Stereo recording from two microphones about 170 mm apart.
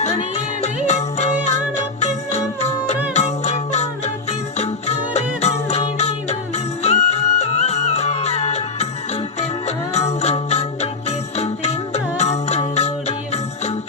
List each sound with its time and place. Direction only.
0.0 s music: 40° left (ahead or behind)